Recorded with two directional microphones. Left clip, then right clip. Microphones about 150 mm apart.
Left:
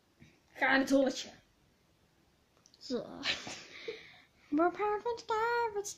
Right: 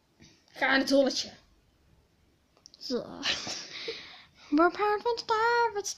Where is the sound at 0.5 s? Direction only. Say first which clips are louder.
Right 3 dB; 45° right (ahead or behind).